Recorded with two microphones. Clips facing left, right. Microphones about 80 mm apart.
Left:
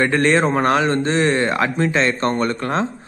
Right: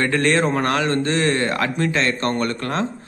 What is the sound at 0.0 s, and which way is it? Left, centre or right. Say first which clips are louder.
Speech: left 2 dB; left.